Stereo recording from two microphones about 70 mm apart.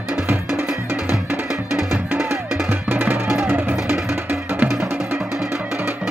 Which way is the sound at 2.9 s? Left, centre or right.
Right.